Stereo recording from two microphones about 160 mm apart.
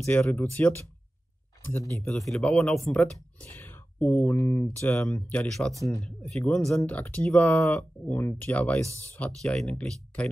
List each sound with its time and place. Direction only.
0.0 s speech: 15° left (ahead or behind)
2.0 s speech: centre (ahead or behind)